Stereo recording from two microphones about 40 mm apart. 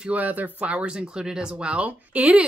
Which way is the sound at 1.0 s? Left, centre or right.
Centre.